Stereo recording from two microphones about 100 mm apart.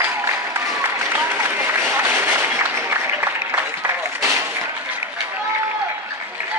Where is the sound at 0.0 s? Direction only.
25° right (ahead or behind).